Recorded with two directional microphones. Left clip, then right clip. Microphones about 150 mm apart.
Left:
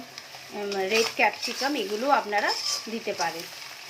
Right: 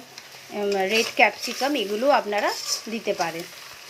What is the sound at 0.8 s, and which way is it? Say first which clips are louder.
Speech: right 3 dB; 40° right (ahead or behind).